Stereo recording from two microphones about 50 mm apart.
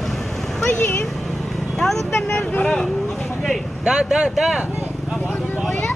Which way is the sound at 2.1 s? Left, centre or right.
Left.